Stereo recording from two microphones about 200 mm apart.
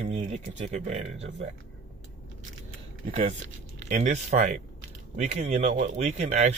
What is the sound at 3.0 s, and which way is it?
Speech, 40° right (ahead or behind).